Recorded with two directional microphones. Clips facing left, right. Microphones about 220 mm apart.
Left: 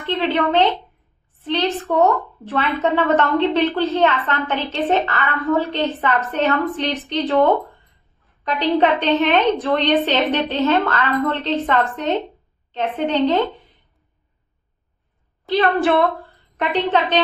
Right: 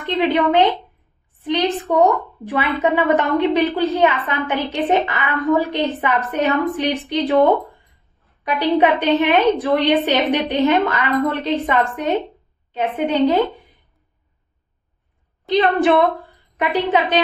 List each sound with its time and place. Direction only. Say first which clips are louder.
0.0 s a woman's voice: right 2 dB; 15° right (ahead or behind)
15.4 s a woman's voice: right 2 dB; 20° right (ahead or behind)